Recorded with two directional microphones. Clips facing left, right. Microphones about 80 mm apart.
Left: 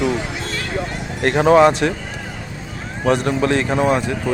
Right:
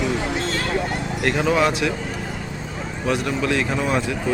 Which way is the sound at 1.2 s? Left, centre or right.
Left.